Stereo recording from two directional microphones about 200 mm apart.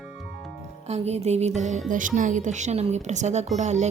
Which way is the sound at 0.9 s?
35° right (ahead or behind).